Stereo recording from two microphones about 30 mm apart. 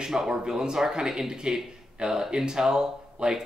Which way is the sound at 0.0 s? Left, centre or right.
Centre.